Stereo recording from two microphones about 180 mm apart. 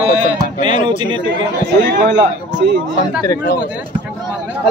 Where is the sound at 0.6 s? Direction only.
25° right (ahead or behind).